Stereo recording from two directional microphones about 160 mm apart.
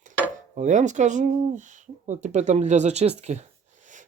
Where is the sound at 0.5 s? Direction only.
50° right (ahead or behind).